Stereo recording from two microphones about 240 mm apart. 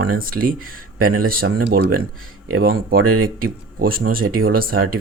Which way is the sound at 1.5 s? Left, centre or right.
Right.